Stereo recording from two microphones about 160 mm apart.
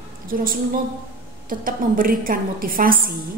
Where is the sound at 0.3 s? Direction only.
60° right (ahead or behind).